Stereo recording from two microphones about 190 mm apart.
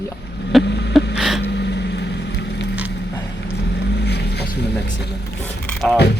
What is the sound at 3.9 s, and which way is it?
Boat, 60° left (ahead or behind).